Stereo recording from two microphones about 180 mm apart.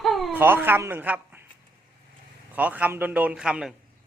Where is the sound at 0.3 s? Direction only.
10° right (ahead or behind).